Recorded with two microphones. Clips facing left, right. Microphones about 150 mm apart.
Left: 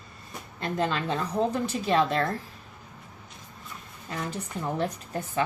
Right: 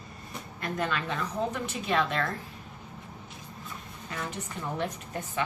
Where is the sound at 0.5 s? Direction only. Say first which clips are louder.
Left 3 dB; 30° left (ahead or behind).